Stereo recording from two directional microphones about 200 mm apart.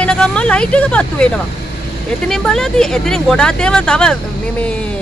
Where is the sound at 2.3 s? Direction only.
5° left (ahead or behind).